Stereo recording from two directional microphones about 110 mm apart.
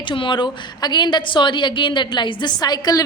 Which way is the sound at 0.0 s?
50° left (ahead or behind).